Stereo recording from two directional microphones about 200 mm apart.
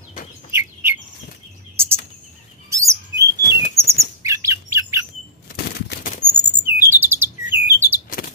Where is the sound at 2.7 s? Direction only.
15° right (ahead or behind).